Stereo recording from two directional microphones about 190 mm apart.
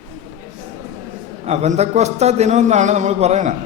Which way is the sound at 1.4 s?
35° right (ahead or behind).